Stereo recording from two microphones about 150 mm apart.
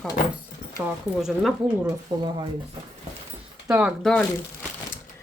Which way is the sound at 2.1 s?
30° right (ahead or behind).